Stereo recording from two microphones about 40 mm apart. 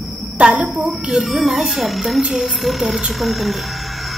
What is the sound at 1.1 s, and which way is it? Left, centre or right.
A woman's voice, centre.